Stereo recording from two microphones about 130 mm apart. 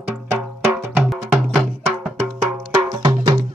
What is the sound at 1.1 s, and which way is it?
Music, centre (ahead or behind).